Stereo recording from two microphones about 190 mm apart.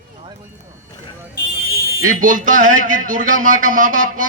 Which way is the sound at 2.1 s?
45° right (ahead or behind).